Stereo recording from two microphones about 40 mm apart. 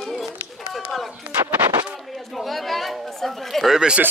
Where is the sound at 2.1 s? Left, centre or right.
Centre.